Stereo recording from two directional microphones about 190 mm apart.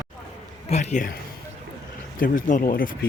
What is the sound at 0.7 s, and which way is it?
Speech, 35° left (ahead or behind).